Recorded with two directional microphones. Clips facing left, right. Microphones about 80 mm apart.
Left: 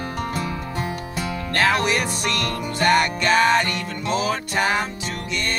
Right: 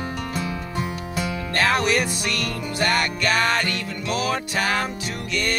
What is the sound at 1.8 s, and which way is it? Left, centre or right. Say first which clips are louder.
Music: even; left.